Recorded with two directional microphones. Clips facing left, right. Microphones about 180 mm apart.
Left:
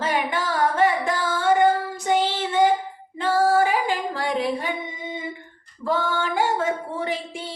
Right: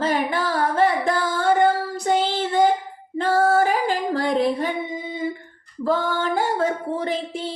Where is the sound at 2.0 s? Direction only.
40° right (ahead or behind).